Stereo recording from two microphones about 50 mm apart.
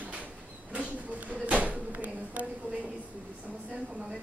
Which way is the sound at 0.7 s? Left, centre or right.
Right.